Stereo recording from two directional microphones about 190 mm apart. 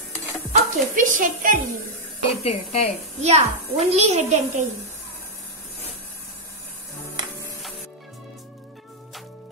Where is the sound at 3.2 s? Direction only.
35° right (ahead or behind).